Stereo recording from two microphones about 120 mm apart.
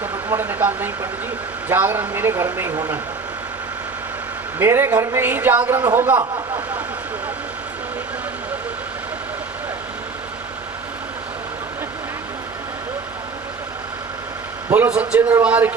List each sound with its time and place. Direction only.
0.0 s a sound: 20° right (ahead or behind)
1.7 s a man's voice: 15° right (ahead or behind)
4.6 s a man's voice: 20° right (ahead or behind)
14.7 s a man's voice: 10° right (ahead or behind)